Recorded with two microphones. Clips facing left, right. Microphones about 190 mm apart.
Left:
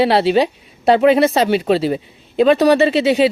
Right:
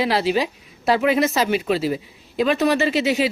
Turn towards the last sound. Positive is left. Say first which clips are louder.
# left 6 dB
turn(degrees=30)  # may be behind; listen again after turning